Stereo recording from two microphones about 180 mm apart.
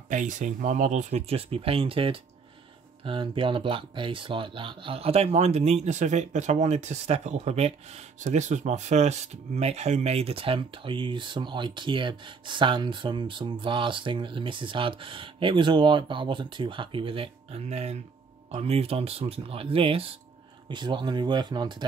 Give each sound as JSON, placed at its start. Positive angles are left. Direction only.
{"t": 0.1, "sound": "speech", "side_deg": -45}